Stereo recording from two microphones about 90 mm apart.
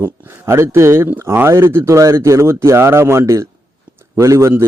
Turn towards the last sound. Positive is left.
turn(degrees=-35)  # may be behind; listen again after turning